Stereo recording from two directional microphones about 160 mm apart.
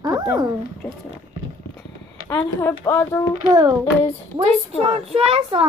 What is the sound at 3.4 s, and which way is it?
Speech, 25° right (ahead or behind).